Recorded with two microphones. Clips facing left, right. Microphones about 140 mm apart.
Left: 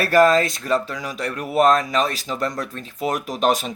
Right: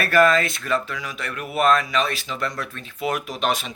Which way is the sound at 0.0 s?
35° left (ahead or behind).